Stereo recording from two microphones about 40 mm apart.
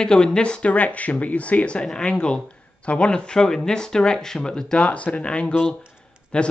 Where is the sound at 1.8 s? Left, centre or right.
Centre.